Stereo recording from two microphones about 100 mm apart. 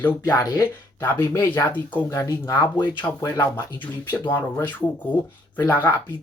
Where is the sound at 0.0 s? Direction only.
20° left (ahead or behind).